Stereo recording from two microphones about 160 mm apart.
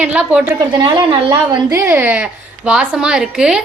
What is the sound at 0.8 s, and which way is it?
Speech, 25° right (ahead or behind).